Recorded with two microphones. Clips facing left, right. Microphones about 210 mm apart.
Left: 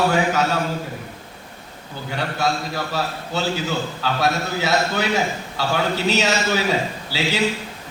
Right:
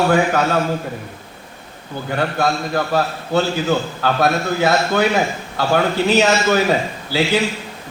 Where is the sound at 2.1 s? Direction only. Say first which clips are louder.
Right 4 dB; 55° right (ahead or behind).